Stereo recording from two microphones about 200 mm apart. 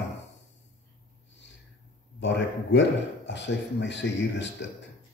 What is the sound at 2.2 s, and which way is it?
A man's voice, 65° left (ahead or behind).